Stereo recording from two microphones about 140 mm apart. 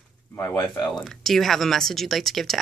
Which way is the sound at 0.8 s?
Centre (ahead or behind).